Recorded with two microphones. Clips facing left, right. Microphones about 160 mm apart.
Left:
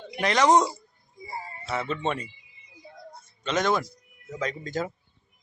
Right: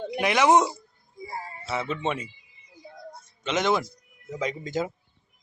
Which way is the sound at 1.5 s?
5° right (ahead or behind).